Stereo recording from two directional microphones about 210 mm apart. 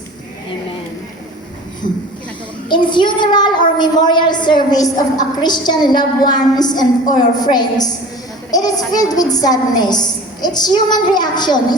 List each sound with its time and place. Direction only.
1.8 s speech: 40° left (ahead or behind)
2.6 s a woman's voice: 20° left (ahead or behind)
8.4 s a sound: 20° left (ahead or behind)
8.9 s a woman's voice: 20° left (ahead or behind)